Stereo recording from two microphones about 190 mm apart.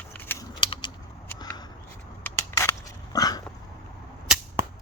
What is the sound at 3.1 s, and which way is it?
Dog, 20° left (ahead or behind).